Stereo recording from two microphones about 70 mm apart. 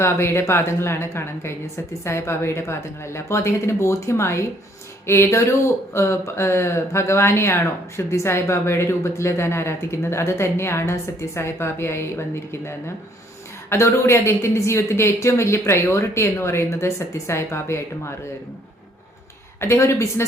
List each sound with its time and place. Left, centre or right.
0.0 s speech: left
19.5 s speech: left